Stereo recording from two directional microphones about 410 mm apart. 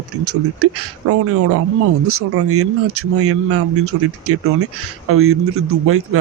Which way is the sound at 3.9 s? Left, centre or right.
Right.